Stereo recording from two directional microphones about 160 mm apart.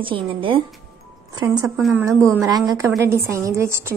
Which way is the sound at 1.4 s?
20° right (ahead or behind).